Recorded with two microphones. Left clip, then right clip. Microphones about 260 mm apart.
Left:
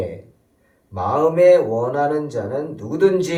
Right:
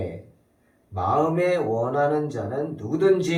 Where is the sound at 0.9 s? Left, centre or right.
Left.